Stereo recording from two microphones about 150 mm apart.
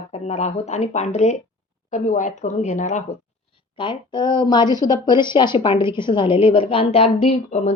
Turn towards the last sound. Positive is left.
turn(degrees=45)  # may be behind; listen again after turning